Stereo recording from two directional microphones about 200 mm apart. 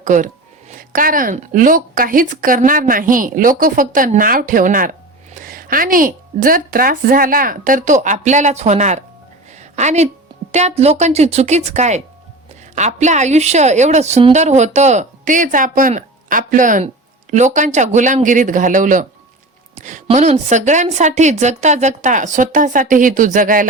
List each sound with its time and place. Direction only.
0.0 s speech: 40° right (ahead or behind)
9.6 s a sound: 35° right (ahead or behind)
10.5 s a woman's voice: 35° right (ahead or behind)